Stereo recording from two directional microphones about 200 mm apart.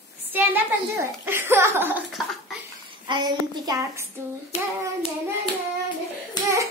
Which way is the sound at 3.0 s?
20° right (ahead or behind).